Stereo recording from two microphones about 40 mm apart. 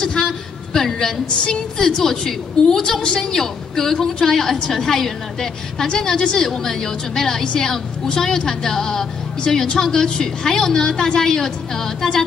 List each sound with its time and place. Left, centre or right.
0.0 s a woman's voice: centre